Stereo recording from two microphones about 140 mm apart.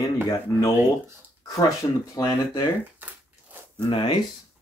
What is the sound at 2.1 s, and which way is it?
Speech, 30° left (ahead or behind).